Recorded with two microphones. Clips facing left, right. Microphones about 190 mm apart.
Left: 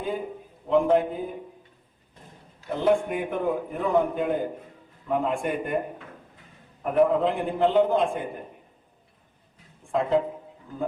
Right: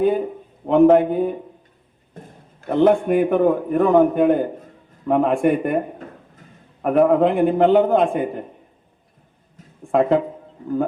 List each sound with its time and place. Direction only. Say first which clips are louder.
0.7 s a man's voice: right 8 dB; 70° right (ahead or behind)
2.1 s a man's voice: right 8 dB; 55° right (ahead or behind)
6.8 s a man's voice: right 6 dB; 65° right (ahead or behind)
9.9 s a man's voice: right 8 dB; 65° right (ahead or behind)